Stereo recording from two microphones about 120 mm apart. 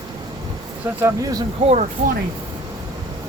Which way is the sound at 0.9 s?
25° right (ahead or behind).